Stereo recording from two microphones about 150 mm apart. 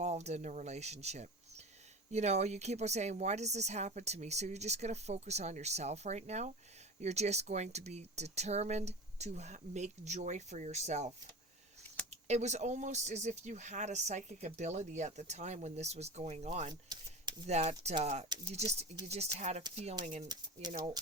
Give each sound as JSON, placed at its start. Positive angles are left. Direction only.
{"t": 0.0, "sound": "speech", "side_deg": -45}
{"t": 12.1, "sound": "speech", "side_deg": -50}
{"t": 20.2, "sound": "speech", "side_deg": -30}